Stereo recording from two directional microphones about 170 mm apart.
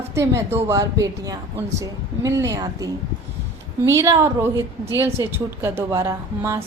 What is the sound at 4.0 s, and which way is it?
A woman's voice, 15° right (ahead or behind).